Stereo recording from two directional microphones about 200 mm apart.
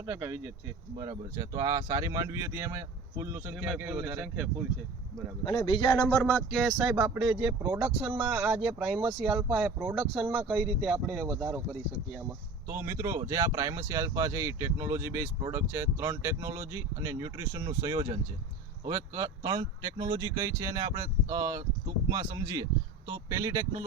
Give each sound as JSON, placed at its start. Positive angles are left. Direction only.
{"t": 0.0, "sound": "speech", "side_deg": -10}
{"t": 5.5, "sound": "speech", "side_deg": 25}